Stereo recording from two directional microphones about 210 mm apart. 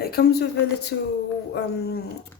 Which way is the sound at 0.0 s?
45° left (ahead or behind).